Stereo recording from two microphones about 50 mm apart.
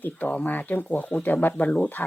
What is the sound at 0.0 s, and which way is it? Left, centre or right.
Speech, left.